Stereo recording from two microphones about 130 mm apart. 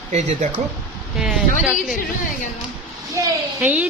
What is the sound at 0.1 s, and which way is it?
Speech, 65° right (ahead or behind).